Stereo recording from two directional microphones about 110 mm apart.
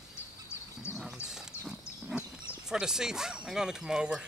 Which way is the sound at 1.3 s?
5° right (ahead or behind).